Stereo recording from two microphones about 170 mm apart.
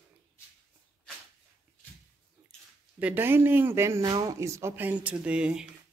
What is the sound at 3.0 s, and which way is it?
Speech, 10° right (ahead or behind).